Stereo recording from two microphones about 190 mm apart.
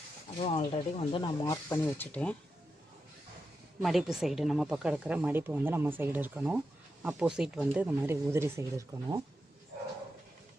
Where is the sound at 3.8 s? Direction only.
Centre (ahead or behind).